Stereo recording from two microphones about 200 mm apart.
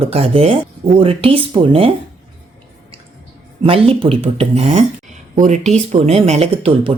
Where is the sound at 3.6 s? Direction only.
30° right (ahead or behind).